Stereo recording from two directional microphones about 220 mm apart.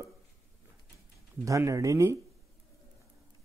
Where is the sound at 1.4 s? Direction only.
15° right (ahead or behind).